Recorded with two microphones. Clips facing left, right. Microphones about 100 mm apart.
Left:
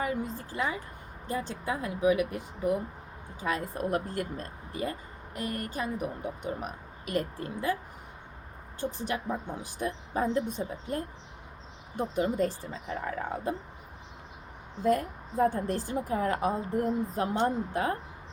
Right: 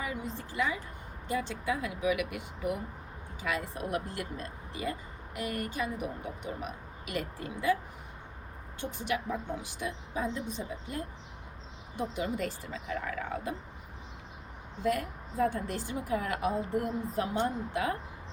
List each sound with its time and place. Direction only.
0.0 s a woman's voice: 45° left (ahead or behind)
8.8 s speech: 35° left (ahead or behind)
14.8 s speech: 35° left (ahead or behind)